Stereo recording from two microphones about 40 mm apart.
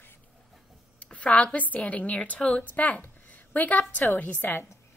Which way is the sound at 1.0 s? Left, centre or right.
Left.